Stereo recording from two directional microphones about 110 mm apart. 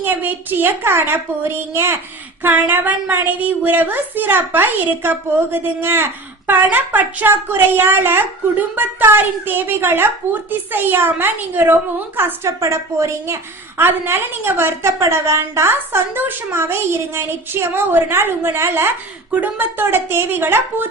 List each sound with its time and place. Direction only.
0.0 s a woman's voice: 15° right (ahead or behind)